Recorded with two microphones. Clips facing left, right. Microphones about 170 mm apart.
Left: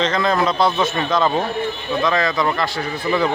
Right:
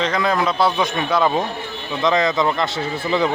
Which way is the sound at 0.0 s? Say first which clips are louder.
Left 1 dB; 10° right (ahead or behind).